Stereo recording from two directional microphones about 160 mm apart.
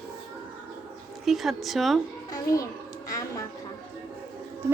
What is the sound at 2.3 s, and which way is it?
A child's voice, 20° left (ahead or behind).